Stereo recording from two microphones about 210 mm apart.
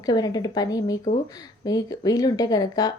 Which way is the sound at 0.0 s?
20° left (ahead or behind).